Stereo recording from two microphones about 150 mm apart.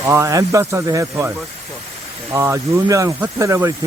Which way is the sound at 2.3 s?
20° right (ahead or behind).